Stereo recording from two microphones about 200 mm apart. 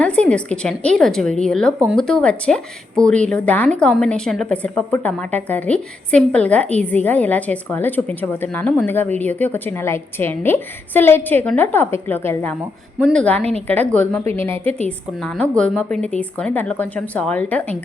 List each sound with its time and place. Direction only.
0.0 s a woman's voice: 5° left (ahead or behind)
14.5 s a woman's voice: 30° right (ahead or behind)
14.8 s a woman's voice: 5° left (ahead or behind)